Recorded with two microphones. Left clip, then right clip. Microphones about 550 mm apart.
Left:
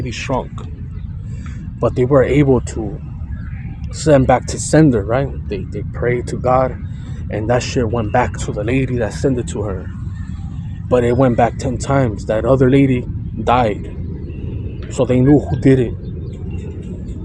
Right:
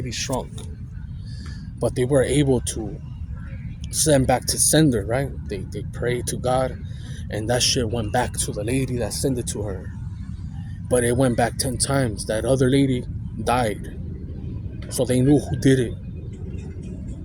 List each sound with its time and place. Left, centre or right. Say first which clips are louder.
1.8 s speech: left 7 dB; right
4.1 s speech: left 7 dB; right
10.8 s speech: left 6 dB; right
14.9 s speech: left 6 dB; right